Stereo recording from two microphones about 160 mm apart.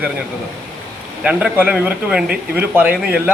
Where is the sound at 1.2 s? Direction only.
5° right (ahead or behind).